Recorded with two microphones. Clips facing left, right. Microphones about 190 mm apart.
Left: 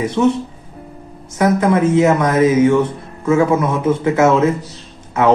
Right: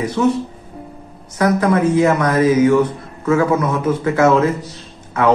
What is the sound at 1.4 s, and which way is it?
Speech, 25° left (ahead or behind).